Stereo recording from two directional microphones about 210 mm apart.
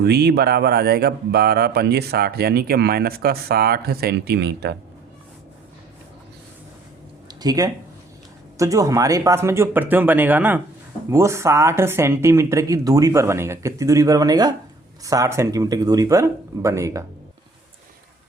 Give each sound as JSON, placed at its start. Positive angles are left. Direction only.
{"t": 0.0, "sound": "speech", "side_deg": -50}
{"t": 7.3, "sound": "a sound", "side_deg": -20}
{"t": 8.5, "sound": "speech", "side_deg": -15}